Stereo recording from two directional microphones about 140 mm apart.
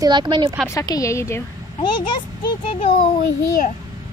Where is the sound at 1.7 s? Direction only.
35° left (ahead or behind).